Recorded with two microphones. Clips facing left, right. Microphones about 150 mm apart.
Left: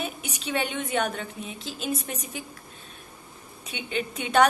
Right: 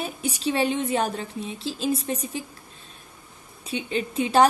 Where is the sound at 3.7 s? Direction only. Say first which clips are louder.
Right 3 dB; 35° right (ahead or behind).